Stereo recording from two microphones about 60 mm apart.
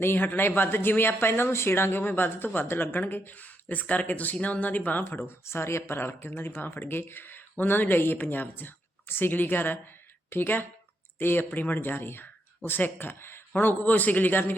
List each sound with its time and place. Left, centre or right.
0.0 s speech: left
5.0 s speech: left
13.5 s a man's voice: left